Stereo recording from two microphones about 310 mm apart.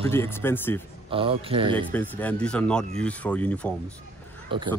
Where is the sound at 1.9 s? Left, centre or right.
Centre.